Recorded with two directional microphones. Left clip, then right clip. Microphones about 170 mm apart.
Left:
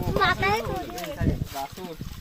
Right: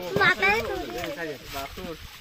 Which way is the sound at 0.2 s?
55° right (ahead or behind).